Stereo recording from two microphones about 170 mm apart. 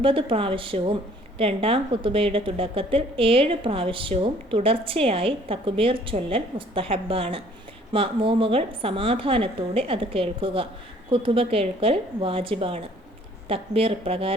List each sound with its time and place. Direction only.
0.0 s a woman's voice: 30° right (ahead or behind)